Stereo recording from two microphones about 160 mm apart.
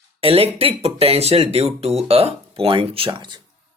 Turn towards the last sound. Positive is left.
turn(degrees=-30)  # may be behind; listen again after turning